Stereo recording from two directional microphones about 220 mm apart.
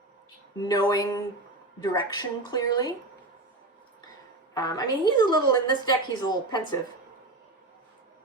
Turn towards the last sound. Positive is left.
turn(degrees=20)  # may be behind; listen again after turning